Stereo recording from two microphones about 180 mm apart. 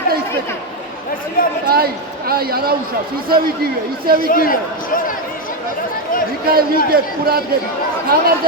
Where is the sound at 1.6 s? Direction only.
55° right (ahead or behind).